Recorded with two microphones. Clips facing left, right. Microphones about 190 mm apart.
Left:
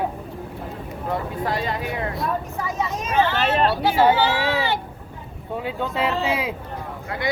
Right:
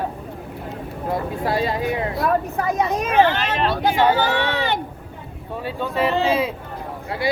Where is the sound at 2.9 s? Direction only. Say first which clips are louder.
Right 4 dB; 60° right (ahead or behind).